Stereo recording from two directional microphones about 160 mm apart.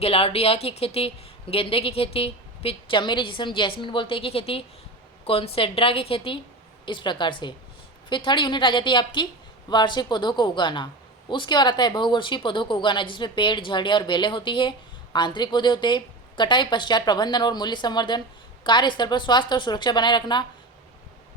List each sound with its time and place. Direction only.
0.0 s a woman's voice: 35° left (ahead or behind)